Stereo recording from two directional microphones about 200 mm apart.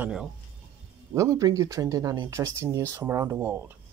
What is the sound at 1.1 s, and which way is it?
Speech, 15° right (ahead or behind).